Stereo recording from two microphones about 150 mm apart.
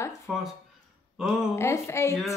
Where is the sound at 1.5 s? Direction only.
15° left (ahead or behind).